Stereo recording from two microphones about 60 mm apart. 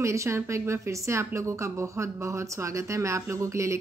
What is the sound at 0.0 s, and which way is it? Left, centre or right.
Speech, right.